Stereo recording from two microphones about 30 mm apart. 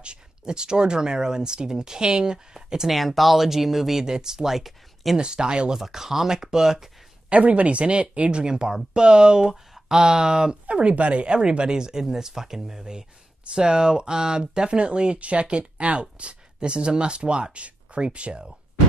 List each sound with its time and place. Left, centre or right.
0.0 s speech: right
2.9 s speech: centre
4.0 s speech: centre
5.1 s speech: right
5.8 s speech: centre
7.2 s speech: right
8.4 s speech: right
11.0 s speech: right